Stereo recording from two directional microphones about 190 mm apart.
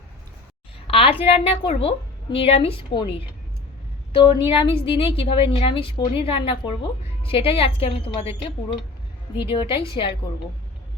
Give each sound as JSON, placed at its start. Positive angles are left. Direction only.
{"t": 0.9, "sound": "a woman's voice", "side_deg": 30}
{"t": 4.1, "sound": "a woman's voice", "side_deg": 25}
{"t": 9.4, "sound": "a woman's voice", "side_deg": 25}